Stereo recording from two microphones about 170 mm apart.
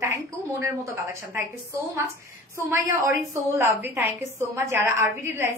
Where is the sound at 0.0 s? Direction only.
15° right (ahead or behind).